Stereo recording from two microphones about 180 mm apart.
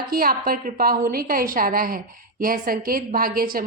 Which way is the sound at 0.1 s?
55° right (ahead or behind).